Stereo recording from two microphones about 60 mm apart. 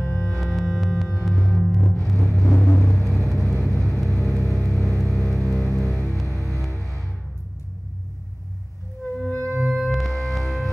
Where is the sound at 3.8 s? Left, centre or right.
Centre.